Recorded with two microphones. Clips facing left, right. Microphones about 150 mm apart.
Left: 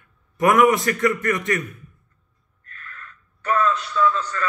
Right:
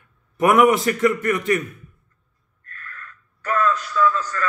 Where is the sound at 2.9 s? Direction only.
25° left (ahead or behind).